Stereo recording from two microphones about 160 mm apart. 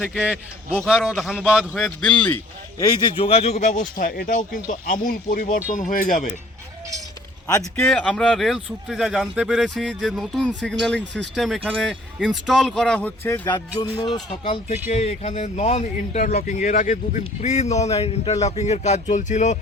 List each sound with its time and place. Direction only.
0.0 s a man's voice: 5° right (ahead or behind)
2.7 s speech: 20° left (ahead or behind); by 6.3 s 60° left (ahead or behind)
7.9 s speech: 5° left (ahead or behind)
13.5 s speech: 25° left (ahead or behind)
14.4 s speech: 45° left (ahead or behind)
16.3 s speech: 60° left (ahead or behind)